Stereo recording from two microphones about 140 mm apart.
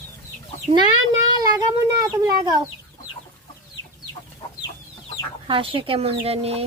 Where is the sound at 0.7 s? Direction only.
40° right (ahead or behind).